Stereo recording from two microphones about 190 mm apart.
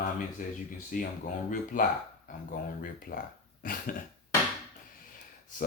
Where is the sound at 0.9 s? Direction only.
45° left (ahead or behind).